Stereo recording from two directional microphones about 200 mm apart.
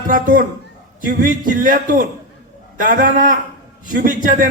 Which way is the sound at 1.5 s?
40° right (ahead or behind).